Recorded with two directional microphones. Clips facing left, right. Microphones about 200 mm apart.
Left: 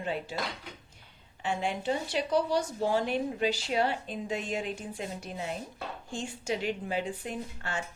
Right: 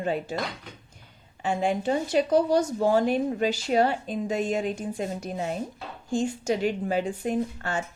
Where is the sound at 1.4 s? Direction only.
45° right (ahead or behind).